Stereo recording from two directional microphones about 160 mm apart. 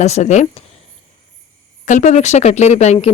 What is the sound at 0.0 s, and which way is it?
Speech, 45° left (ahead or behind).